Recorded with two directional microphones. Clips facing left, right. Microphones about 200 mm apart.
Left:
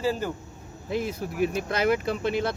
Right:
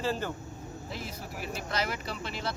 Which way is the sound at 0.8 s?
55° left (ahead or behind).